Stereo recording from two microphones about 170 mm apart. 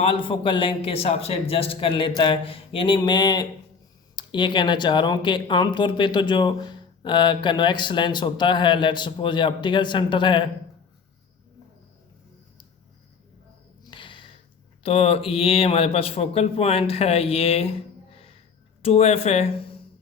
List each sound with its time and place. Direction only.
0.0 s a man's voice: 30° left (ahead or behind)
13.8 s a sound: 30° left (ahead or behind)
14.8 s a man's voice: 35° left (ahead or behind)
18.8 s a man's voice: 40° left (ahead or behind)